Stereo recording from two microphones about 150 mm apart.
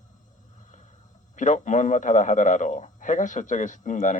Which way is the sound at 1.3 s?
55° left (ahead or behind).